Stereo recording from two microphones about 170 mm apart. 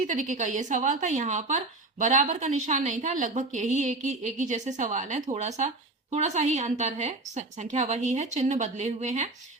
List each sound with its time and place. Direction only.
0.0 s a woman's voice: 50° right (ahead or behind)